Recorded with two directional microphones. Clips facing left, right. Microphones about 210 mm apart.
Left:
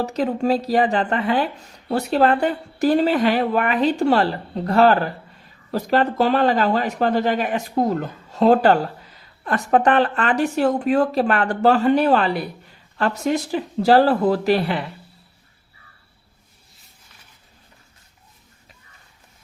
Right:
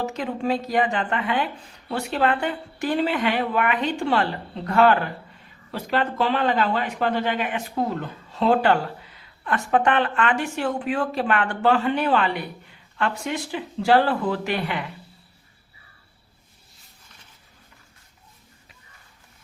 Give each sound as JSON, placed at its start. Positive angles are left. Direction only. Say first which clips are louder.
{"t": 0.0, "sound": "speech", "louder": "left 5 dB", "side_deg": 40}